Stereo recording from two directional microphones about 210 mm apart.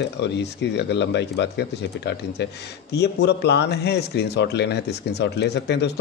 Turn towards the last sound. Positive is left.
turn(degrees=55)  # may be behind; listen again after turning